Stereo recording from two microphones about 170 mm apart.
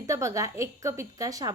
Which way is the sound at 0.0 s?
15° right (ahead or behind).